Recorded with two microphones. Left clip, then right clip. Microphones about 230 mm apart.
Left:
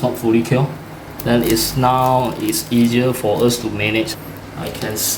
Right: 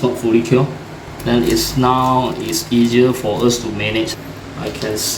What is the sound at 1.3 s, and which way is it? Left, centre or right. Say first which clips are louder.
Speech: right 1 dB; left.